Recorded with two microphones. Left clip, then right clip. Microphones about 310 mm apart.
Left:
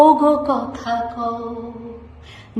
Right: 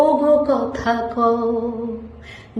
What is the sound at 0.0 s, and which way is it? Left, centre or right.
Speech, centre.